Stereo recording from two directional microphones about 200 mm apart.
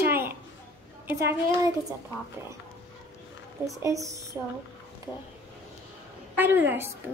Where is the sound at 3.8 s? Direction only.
15° right (ahead or behind).